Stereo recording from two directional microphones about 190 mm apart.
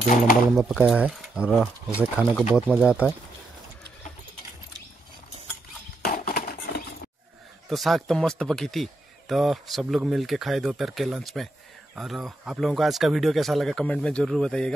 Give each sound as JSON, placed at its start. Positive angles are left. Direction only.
{"t": 0.6, "sound": "speech", "side_deg": 0}
{"t": 6.0, "sound": "horse", "side_deg": 50}
{"t": 7.7, "sound": "speech", "side_deg": 0}